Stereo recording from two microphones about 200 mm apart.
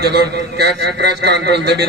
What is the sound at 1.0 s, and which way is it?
Speech, 55° right (ahead or behind).